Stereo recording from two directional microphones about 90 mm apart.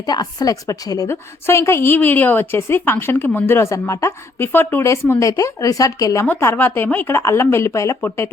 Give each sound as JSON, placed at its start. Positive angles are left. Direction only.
{"t": 0.0, "sound": "a woman's voice", "side_deg": 45}
{"t": 1.1, "sound": "a woman's voice", "side_deg": 30}
{"t": 4.4, "sound": "a woman's voice", "side_deg": 20}
{"t": 6.2, "sound": "a woman's voice", "side_deg": 25}